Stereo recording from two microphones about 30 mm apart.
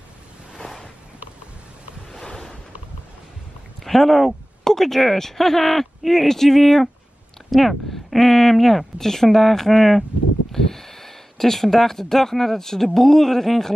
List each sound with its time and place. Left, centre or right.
2.2 s ocean: left
3.8 s a woman's voice: centre